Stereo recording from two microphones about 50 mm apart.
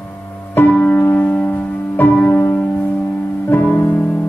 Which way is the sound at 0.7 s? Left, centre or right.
Left.